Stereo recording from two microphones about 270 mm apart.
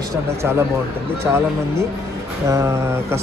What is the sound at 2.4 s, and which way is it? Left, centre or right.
Speech, centre.